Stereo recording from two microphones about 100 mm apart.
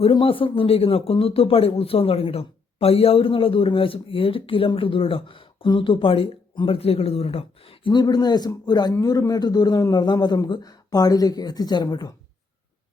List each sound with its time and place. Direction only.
0.0 s a man's voice: 60° left (ahead or behind)
5.6 s speech: 50° left (ahead or behind); by 7.8 s 80° left
7.9 s a man's voice: 45° left (ahead or behind)